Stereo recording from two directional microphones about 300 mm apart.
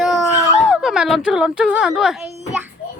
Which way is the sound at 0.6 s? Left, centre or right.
Centre.